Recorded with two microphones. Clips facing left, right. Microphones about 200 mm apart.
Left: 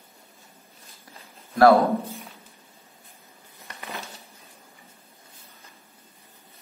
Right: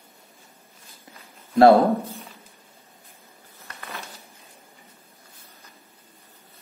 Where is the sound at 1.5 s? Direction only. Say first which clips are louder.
Right 2 dB; 30° right (ahead or behind).